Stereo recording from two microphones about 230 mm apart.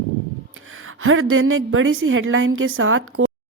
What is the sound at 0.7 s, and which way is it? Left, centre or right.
Speech, right.